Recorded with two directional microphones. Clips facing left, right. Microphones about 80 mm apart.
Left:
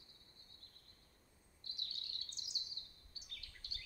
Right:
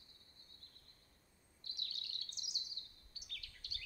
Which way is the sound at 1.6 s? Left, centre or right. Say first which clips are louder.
Right 1 dB; left.